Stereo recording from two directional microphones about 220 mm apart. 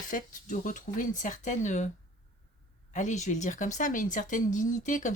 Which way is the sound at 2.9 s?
35° left (ahead or behind).